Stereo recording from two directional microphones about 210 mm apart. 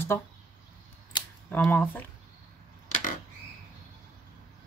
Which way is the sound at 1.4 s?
10° left (ahead or behind).